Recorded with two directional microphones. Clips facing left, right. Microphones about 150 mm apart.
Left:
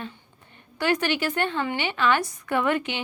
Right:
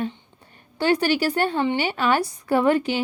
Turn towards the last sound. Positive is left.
turn(degrees=-35)  # may be behind; listen again after turning